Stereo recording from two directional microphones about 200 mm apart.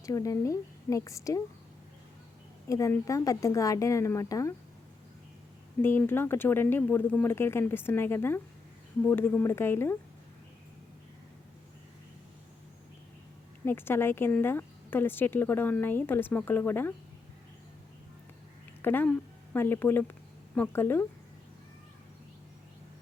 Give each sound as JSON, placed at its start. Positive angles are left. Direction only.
{"t": 0.0, "sound": "speech", "side_deg": 15}
{"t": 2.6, "sound": "speech", "side_deg": 15}
{"t": 5.8, "sound": "speech", "side_deg": 10}
{"t": 13.7, "sound": "speech", "side_deg": 10}
{"t": 18.8, "sound": "speech", "side_deg": 10}